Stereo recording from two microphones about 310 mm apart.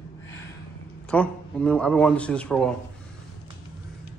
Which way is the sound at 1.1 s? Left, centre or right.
Centre.